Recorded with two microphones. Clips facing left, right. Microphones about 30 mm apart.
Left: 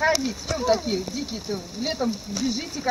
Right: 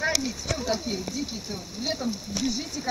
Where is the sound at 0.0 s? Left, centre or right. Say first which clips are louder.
Left 5 dB; centre.